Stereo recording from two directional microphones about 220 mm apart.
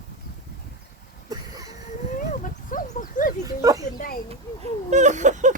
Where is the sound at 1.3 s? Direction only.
15° right (ahead or behind).